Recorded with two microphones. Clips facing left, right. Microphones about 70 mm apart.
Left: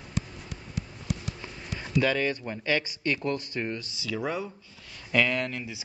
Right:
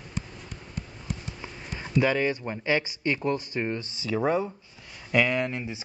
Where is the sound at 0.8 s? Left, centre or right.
Left.